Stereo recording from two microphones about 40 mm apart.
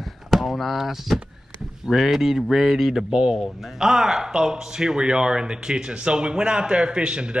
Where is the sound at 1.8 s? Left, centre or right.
Centre.